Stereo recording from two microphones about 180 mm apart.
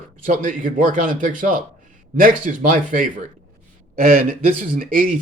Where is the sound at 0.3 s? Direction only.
45° right (ahead or behind).